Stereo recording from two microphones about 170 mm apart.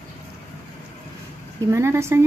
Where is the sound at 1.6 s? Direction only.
15° right (ahead or behind).